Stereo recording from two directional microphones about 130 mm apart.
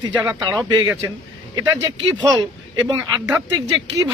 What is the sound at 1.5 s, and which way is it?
Speech, 30° right (ahead or behind).